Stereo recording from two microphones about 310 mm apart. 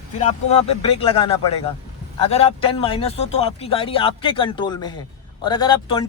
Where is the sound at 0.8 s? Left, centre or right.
Centre.